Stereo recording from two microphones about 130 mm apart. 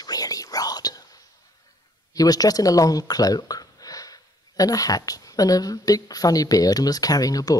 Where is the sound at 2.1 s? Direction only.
30° left (ahead or behind).